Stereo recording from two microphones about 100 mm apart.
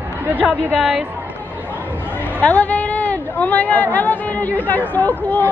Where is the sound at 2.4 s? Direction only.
15° left (ahead or behind).